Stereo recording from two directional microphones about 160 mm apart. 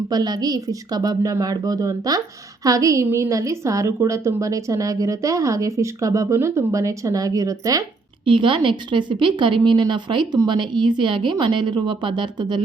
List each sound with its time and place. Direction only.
0.1 s a woman's voice: 25° right (ahead or behind)
8.2 s a woman's voice: 30° right (ahead or behind)